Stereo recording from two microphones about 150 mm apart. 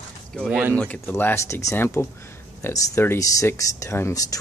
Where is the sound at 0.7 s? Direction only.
10° left (ahead or behind).